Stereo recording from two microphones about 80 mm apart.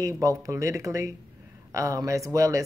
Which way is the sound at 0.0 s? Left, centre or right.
Right.